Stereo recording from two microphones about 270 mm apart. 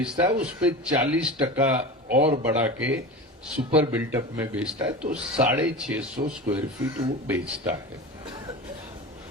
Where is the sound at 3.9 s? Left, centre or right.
Centre.